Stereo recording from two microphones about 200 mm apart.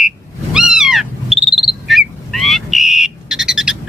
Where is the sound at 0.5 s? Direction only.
5° right (ahead or behind).